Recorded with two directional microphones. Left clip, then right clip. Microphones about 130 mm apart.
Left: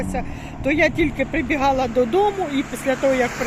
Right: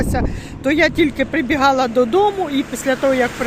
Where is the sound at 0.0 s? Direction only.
35° right (ahead or behind).